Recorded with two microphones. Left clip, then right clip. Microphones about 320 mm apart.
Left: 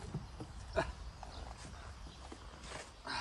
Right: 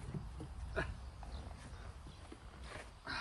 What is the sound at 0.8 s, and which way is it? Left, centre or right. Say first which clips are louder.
Dog: left 5 dB; centre.